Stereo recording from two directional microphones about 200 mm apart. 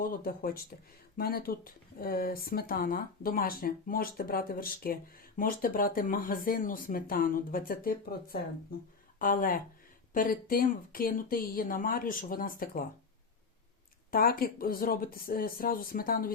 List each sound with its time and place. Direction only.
0.0 s speech: 45° left (ahead or behind)
14.1 s speech: 50° left (ahead or behind)